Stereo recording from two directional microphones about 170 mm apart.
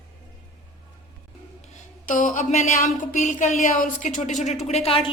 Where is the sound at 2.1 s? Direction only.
50° left (ahead or behind).